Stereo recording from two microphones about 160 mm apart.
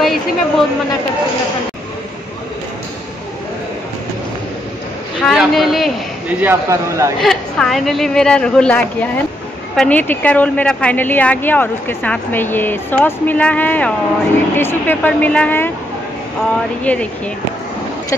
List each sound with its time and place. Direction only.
0.0 s speech: centre (ahead or behind)
5.2 s a sound: centre (ahead or behind)
6.4 s speech: 15° right (ahead or behind)
7.2 s a woman's voice: 5° left (ahead or behind)
16.8 s speech: 10° left (ahead or behind)